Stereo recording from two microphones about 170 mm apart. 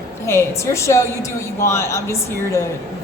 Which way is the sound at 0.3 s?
15° left (ahead or behind).